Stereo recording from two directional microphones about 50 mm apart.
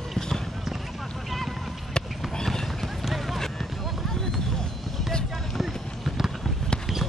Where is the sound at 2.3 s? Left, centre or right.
Centre.